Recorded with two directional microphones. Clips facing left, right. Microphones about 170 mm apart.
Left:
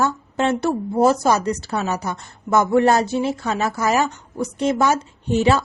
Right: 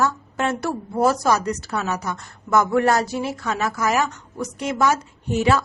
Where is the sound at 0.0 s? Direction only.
25° left (ahead or behind).